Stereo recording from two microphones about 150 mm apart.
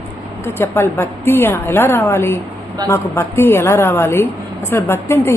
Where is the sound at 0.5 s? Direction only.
15° left (ahead or behind).